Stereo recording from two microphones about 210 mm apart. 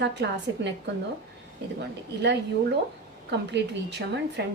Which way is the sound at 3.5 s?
55° right (ahead or behind).